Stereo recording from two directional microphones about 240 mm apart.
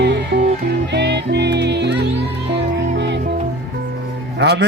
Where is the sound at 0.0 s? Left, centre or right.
Right.